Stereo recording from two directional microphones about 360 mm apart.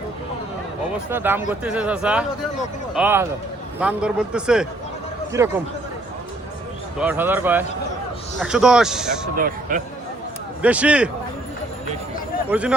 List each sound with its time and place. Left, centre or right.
1.1 s speech: centre
7.0 s speech: centre
9.3 s speech: right
10.6 s speech: centre
12.5 s speech: centre